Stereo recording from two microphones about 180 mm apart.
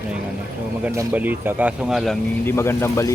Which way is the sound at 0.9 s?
10° right (ahead or behind).